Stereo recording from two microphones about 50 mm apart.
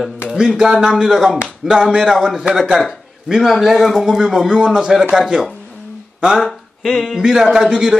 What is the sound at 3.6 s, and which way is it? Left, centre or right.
Speech, centre.